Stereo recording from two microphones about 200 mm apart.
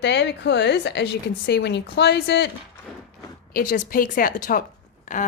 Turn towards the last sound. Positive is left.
turn(degrees=40)  # may be behind; listen again after turning